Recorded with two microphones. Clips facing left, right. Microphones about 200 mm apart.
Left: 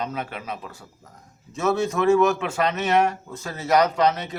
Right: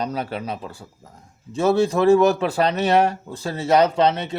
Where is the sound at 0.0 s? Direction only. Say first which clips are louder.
Right 4 dB; 35° right (ahead or behind).